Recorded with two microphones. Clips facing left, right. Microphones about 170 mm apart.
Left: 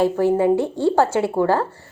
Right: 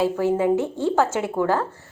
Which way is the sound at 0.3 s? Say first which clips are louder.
Left 3 dB; 15° left (ahead or behind).